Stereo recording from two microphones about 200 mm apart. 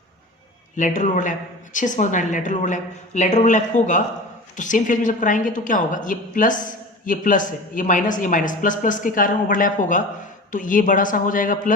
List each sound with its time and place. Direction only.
0.8 s a woman's voice: 40° left (ahead or behind)